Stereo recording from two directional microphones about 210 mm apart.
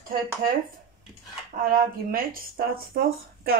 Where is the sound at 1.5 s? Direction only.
40° right (ahead or behind).